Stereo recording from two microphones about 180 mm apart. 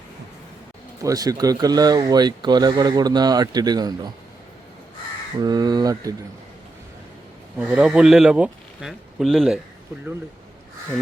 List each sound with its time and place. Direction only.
1.0 s speech: 20° right (ahead or behind)
5.4 s speech: 20° right (ahead or behind)
7.6 s speech: 5° right (ahead or behind)